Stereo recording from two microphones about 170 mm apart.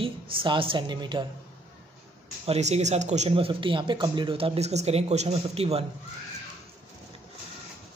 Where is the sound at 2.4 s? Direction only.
40° right (ahead or behind).